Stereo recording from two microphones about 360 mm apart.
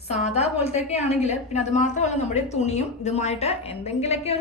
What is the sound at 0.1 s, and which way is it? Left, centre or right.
A woman's voice, centre.